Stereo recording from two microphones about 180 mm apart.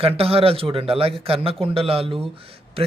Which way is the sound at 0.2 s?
35° right (ahead or behind).